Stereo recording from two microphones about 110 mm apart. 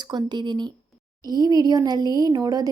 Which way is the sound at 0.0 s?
40° right (ahead or behind).